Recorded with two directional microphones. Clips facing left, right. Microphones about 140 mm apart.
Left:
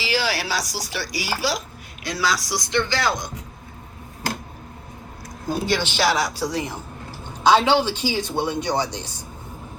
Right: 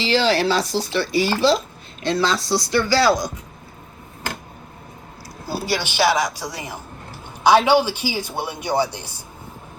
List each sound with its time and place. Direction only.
0.0 s speech: 10° left (ahead or behind)
5.5 s a man's voice: 10° right (ahead or behind)